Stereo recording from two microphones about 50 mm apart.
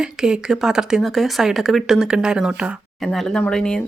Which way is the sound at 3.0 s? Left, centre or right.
Centre.